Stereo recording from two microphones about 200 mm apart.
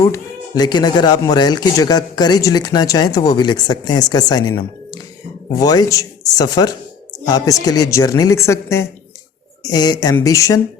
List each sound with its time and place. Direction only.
0.0 s speech: 15° left (ahead or behind)